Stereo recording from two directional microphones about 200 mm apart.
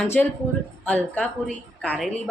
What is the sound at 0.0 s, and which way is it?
Speech, 10° left (ahead or behind).